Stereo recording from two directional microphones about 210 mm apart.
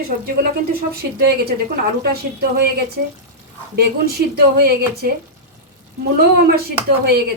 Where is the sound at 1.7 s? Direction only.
50° right (ahead or behind).